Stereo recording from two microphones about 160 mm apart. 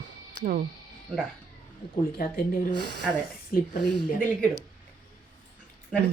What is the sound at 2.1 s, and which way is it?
Speech, 65° left (ahead or behind).